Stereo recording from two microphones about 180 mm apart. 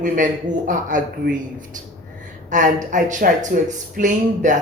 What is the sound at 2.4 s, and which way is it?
Speech, 45° right (ahead or behind).